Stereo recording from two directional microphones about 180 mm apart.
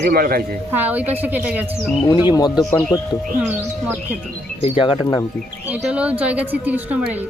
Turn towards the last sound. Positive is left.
turn(degrees=-10)  # may be behind; listen again after turning